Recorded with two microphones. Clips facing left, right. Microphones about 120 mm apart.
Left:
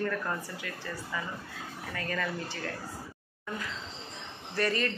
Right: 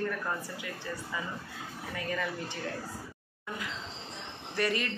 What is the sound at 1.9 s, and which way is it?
Speech, 15° right (ahead or behind).